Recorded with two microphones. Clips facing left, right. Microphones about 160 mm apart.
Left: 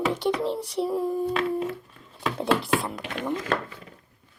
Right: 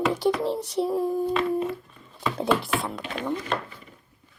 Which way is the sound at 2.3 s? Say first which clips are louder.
Left 1 dB; centre (ahead or behind).